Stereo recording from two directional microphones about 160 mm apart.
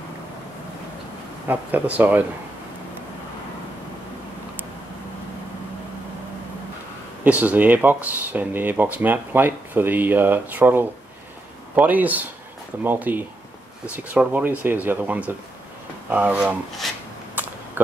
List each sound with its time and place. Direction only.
1.5 s speech: 10° right (ahead or behind)
7.2 s speech: 10° right (ahead or behind)